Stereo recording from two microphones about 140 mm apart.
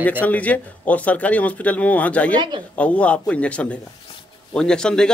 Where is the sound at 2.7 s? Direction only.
10° left (ahead or behind).